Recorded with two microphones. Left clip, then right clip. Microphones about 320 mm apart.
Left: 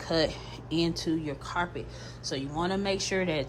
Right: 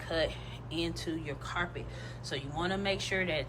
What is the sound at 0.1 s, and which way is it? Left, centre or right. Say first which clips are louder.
Speech: left 5 dB; centre.